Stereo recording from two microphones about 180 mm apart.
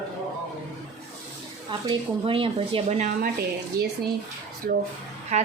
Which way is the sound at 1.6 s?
30° right (ahead or behind).